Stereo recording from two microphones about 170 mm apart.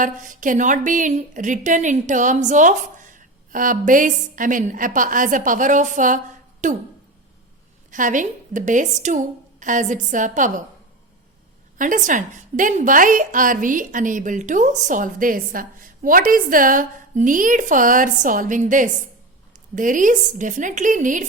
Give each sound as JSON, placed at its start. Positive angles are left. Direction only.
{"t": 0.0, "sound": "a woman's voice", "side_deg": -50}
{"t": 7.9, "sound": "a woman's voice", "side_deg": -50}
{"t": 11.8, "sound": "a woman's voice", "side_deg": -50}